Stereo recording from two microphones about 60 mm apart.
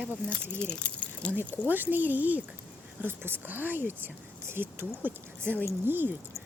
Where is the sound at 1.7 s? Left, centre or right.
Right.